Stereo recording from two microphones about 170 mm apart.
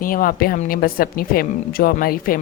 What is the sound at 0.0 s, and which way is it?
A woman's voice, 55° left (ahead or behind).